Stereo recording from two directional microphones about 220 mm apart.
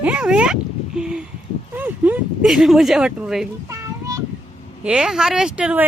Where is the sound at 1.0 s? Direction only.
5° right (ahead or behind).